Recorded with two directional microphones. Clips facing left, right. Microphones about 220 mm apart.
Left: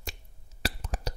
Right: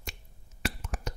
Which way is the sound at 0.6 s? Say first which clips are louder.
Even; 35° left (ahead or behind).